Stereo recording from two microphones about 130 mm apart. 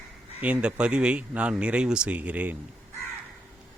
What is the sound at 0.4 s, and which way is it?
Speech, 10° right (ahead or behind).